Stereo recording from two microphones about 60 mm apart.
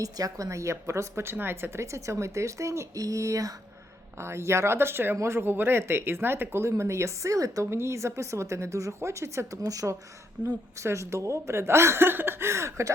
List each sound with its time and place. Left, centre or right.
0.0 s a woman's voice: right
1.8 s a woman's voice: right
4.2 s speech: right
7.7 s a woman's voice: right
10.9 s speech: right